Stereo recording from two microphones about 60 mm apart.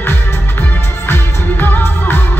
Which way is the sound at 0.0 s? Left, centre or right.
Left.